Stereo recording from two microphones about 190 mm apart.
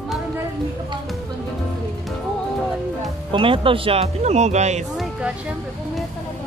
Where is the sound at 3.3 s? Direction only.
25° right (ahead or behind).